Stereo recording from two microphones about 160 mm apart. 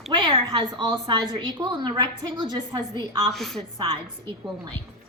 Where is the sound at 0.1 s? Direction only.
30° right (ahead or behind).